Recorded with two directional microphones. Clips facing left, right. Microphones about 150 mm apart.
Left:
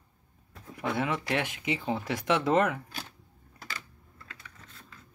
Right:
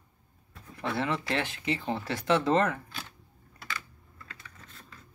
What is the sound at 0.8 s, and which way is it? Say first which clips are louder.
Speech: even; 10° left (ahead or behind).